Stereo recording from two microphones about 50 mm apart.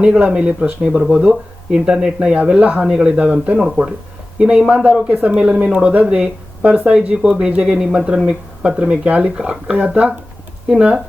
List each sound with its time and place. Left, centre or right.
0.0 s speech: centre
3.6 s speech: centre